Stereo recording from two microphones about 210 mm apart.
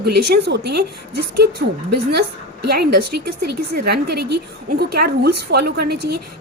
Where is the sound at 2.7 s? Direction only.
50° right (ahead or behind).